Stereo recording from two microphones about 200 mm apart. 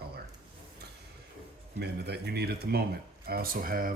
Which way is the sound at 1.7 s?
55° right (ahead or behind).